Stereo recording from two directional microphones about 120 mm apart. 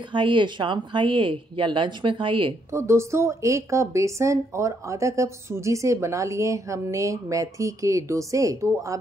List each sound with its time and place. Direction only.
0.1 s speech: 40° right (ahead or behind)
2.7 s a woman's voice: 25° right (ahead or behind)